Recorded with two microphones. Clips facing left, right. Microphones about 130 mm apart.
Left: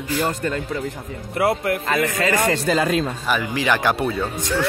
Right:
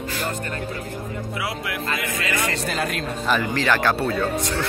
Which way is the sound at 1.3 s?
50° left (ahead or behind).